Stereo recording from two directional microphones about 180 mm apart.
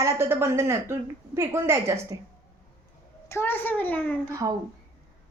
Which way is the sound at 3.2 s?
15° left (ahead or behind).